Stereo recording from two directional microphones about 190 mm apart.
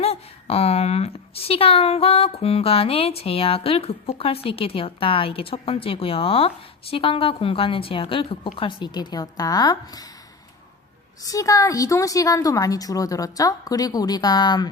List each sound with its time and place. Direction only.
0.0 s a woman's voice: 30° left (ahead or behind)
11.3 s a woman's voice: 15° left (ahead or behind)